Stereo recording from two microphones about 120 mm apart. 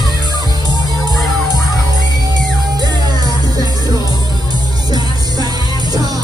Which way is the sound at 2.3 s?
35° right (ahead or behind).